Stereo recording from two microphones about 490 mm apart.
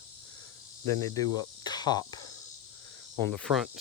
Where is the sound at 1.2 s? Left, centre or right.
Centre.